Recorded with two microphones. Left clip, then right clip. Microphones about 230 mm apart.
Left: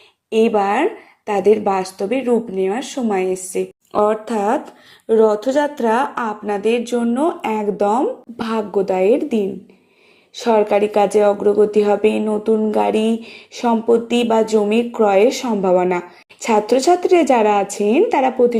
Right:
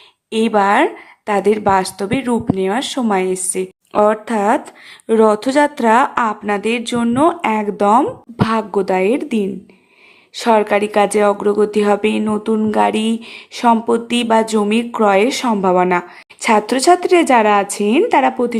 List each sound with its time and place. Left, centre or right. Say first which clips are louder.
0.3 s speech: right 1 dB; centre